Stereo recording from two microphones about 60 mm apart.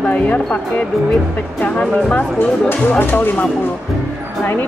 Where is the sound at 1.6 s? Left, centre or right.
Left.